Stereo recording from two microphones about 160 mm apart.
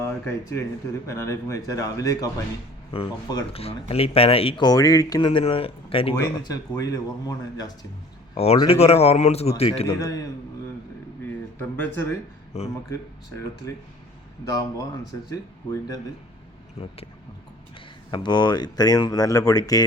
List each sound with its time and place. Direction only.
0.0 s speech: 15° left (ahead or behind); by 6.1 s 35° left (ahead or behind)
6.1 s speech: 20° left (ahead or behind)
8.6 s speech: 40° left (ahead or behind)
9.8 s speech: 20° left (ahead or behind)
11.6 s speech: 10° left (ahead or behind)
12.5 s speech: 40° left (ahead or behind)
13.7 s speech: 20° left (ahead or behind)
18.1 s speech: 30° left (ahead or behind)